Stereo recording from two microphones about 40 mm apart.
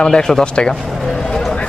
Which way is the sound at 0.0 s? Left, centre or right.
Centre.